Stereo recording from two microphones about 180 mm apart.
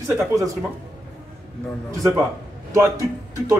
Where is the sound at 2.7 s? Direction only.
15° right (ahead or behind).